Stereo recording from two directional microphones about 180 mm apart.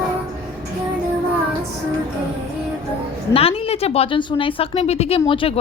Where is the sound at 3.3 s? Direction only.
35° left (ahead or behind).